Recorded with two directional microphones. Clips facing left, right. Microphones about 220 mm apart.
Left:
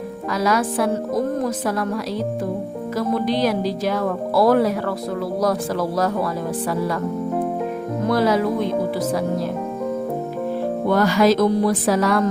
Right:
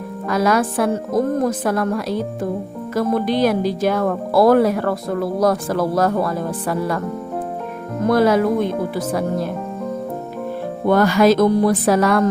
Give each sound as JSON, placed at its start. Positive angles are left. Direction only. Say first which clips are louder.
{"t": 0.3, "sound": "speech", "louder": "right 3 dB", "side_deg": -55}
{"t": 8.0, "sound": "speech", "louder": "right 4 dB", "side_deg": -55}
{"t": 10.8, "sound": "speech", "louder": "right 3 dB", "side_deg": -55}